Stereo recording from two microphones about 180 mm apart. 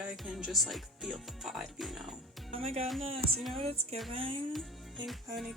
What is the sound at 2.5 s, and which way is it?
Speech, 35° right (ahead or behind).